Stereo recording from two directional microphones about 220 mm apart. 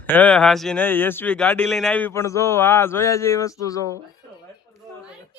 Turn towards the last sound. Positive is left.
turn(degrees=15)  # may be behind; listen again after turning